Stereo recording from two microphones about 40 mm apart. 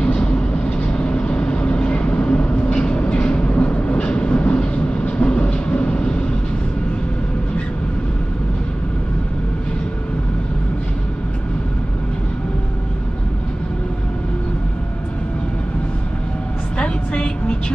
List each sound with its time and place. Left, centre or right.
0.0 s vehicle: left
16.7 s vehicle: left